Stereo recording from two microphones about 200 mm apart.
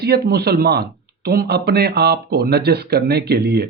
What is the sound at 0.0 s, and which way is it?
Speech, 55° right (ahead or behind).